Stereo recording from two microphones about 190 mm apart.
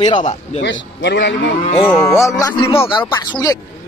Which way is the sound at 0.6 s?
70° left (ahead or behind).